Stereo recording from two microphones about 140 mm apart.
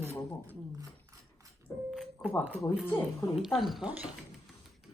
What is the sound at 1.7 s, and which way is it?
Speech, 25° left (ahead or behind).